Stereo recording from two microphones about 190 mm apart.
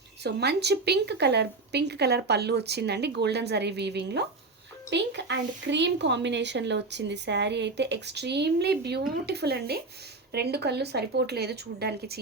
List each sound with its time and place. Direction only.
0.2 s a woman's voice: 60° right (ahead or behind)